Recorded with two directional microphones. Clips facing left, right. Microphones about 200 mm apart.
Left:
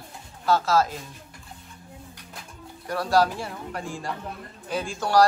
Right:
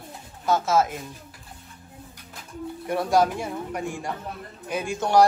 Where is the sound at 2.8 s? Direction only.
20° right (ahead or behind).